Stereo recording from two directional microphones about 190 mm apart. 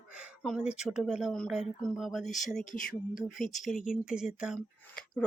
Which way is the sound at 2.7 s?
45° left (ahead or behind).